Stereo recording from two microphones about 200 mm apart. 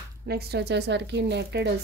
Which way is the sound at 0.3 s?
55° right (ahead or behind).